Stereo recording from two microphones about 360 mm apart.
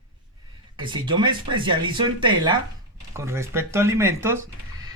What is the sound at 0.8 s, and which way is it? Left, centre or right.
Speech, centre.